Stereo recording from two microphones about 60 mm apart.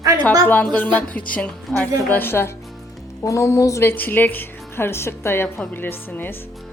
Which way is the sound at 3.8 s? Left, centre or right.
Left.